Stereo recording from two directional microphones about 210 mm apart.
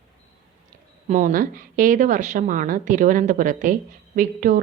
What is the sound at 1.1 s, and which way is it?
A woman's voice, 40° right (ahead or behind).